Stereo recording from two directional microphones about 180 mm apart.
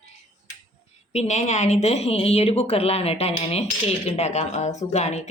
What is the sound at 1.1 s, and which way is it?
Speech, 40° left (ahead or behind).